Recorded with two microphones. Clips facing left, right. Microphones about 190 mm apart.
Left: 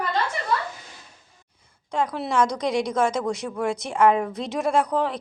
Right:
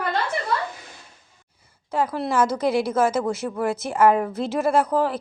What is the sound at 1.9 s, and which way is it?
A woman's voice, 5° right (ahead or behind).